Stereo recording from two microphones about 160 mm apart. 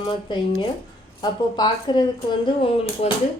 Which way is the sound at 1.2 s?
25° left (ahead or behind).